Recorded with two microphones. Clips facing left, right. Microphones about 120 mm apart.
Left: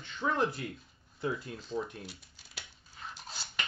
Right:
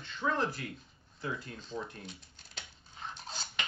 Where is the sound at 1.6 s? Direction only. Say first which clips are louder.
Left 4 dB; 5° left (ahead or behind).